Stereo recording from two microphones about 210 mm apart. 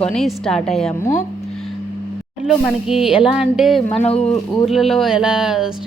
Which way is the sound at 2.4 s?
Centre (ahead or behind).